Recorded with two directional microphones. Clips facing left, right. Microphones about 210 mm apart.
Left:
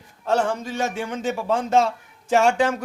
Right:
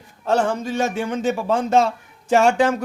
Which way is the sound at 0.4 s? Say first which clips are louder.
Right 3 dB; 35° right (ahead or behind).